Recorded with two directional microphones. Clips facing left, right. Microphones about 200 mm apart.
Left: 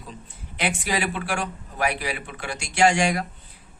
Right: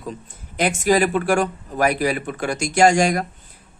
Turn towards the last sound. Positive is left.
turn(degrees=-45)  # may be behind; listen again after turning